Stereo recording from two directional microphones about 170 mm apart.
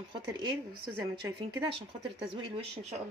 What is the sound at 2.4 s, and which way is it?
Speech, 35° right (ahead or behind).